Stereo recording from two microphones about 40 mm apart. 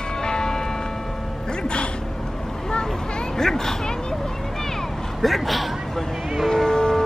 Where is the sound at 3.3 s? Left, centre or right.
Centre.